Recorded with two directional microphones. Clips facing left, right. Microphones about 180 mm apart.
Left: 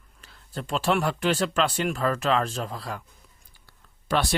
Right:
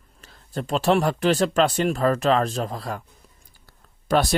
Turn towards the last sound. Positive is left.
turn(degrees=-45)  # may be behind; listen again after turning